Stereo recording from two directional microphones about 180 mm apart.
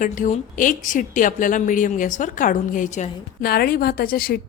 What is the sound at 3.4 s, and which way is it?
Speech, 55° left (ahead or behind).